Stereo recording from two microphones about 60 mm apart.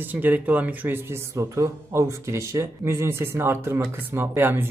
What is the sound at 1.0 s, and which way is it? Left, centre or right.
A man's voice, right.